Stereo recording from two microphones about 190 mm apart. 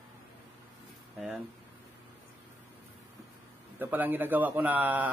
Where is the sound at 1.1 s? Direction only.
5° right (ahead or behind).